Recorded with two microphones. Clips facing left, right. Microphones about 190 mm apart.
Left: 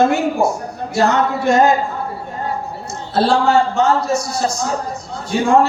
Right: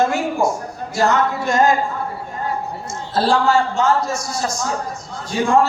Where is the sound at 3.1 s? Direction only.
65° left (ahead or behind).